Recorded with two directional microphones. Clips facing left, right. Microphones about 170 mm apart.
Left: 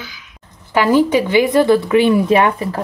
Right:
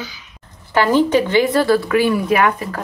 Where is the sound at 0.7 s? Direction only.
10° left (ahead or behind).